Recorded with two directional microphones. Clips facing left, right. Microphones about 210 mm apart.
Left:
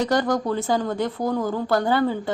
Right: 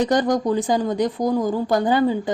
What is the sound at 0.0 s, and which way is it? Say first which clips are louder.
Speech: right 3 dB; 20° right (ahead or behind).